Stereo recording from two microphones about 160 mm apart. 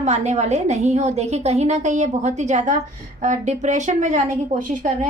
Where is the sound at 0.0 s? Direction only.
45° right (ahead or behind).